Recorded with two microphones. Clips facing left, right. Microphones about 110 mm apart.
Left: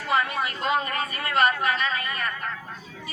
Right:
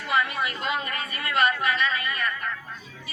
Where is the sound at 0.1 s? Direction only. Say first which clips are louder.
Left 1 dB; 40° left (ahead or behind).